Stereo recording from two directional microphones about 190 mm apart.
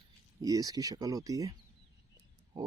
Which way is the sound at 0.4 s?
20° right (ahead or behind).